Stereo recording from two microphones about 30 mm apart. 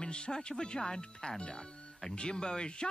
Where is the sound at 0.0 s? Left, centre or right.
Left.